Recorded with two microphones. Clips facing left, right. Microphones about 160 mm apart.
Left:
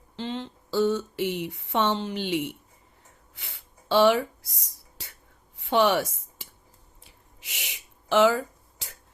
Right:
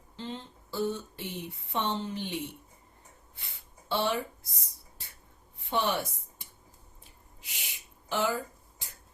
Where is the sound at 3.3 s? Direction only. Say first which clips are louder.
Left 6 dB; 90° left.